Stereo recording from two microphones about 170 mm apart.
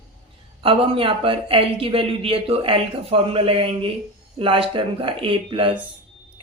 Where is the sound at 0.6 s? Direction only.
30° right (ahead or behind).